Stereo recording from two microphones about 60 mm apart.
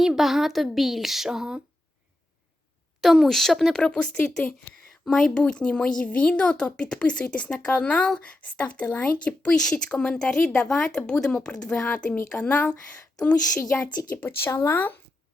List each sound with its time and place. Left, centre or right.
0.0 s speech: centre
3.0 s speech: centre
3.8 s a woman's voice: centre
5.4 s a woman's voice: centre
14.3 s speech: left